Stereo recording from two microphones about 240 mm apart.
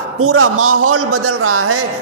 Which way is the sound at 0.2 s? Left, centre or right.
Right.